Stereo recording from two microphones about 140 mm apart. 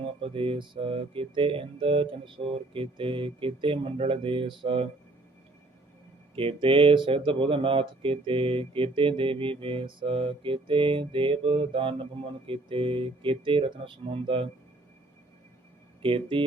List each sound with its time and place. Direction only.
0.2 s speech: 40° right (ahead or behind)
6.3 s speech: 40° right (ahead or behind)
16.0 s speech: 40° right (ahead or behind)